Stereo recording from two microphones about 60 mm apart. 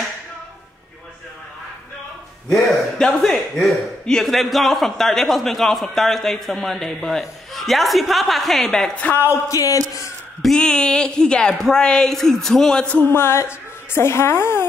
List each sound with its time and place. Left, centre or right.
3.1 s speech: centre
9.3 s speech: left
10.4 s speech: centre
12.8 s speech: left
13.1 s a woman's voice: left